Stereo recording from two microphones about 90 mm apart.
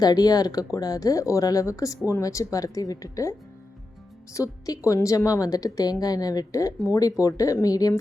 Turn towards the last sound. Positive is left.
turn(degrees=45)  # may be behind; listen again after turning